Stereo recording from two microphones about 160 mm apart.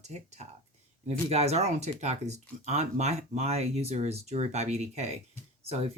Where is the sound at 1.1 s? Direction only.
40° right (ahead or behind).